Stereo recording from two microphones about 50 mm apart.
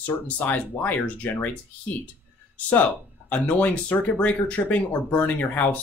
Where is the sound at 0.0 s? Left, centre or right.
Left.